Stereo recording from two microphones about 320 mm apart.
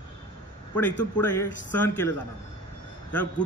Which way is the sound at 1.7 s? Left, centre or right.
Centre.